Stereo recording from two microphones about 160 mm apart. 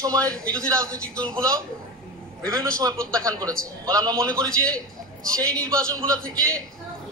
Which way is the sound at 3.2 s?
20° right (ahead or behind).